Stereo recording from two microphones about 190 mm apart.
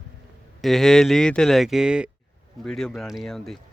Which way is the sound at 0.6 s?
Centre (ahead or behind).